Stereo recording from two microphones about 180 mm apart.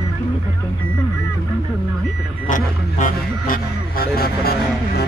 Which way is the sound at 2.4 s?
45° left (ahead or behind).